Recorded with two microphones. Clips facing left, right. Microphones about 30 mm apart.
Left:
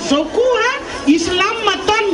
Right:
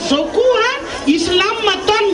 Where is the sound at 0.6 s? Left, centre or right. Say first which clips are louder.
Right 1 dB; right.